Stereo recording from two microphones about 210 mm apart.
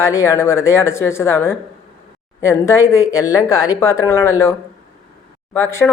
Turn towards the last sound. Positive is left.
turn(degrees=10)  # may be behind; listen again after turning